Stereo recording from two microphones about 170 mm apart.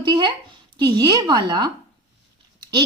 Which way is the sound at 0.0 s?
30° right (ahead or behind).